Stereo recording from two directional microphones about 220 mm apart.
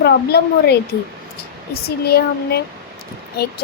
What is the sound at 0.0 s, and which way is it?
A woman's voice, 50° left (ahead or behind).